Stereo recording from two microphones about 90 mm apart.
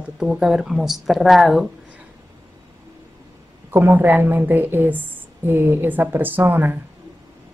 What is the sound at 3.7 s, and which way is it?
Speech, 25° right (ahead or behind).